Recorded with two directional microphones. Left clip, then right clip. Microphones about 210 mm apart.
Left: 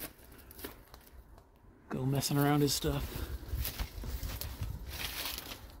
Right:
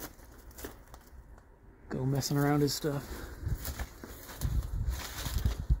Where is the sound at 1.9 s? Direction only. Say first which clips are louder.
Right 1 dB; centre (ahead or behind).